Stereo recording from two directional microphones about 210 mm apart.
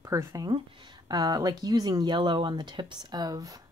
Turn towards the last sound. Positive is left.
turn(degrees=-15)  # may be behind; listen again after turning